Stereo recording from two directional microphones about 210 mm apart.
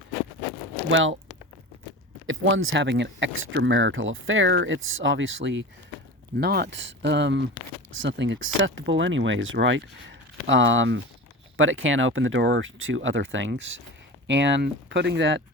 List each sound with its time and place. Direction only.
0.9 s speech: 65° right (ahead or behind)
2.2 s speech: 65° right (ahead or behind)
6.4 s speech: 50° right (ahead or behind)
11.5 s speech: 70° right (ahead or behind)